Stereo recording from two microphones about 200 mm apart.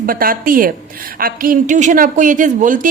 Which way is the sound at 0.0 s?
45° right (ahead or behind).